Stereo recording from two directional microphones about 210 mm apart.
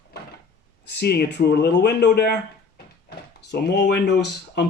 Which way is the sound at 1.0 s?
50° left (ahead or behind).